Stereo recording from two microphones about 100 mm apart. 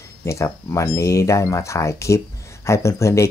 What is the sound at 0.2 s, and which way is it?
Speech, 30° left (ahead or behind).